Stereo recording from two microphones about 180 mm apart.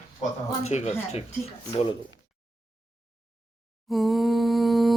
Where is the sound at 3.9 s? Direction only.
Centre (ahead or behind).